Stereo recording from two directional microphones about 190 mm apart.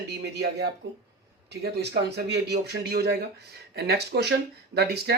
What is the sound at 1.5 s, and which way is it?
Speech, 60° right (ahead or behind).